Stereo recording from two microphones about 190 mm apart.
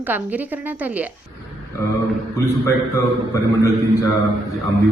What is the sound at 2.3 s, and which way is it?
A man's voice, 15° left (ahead or behind).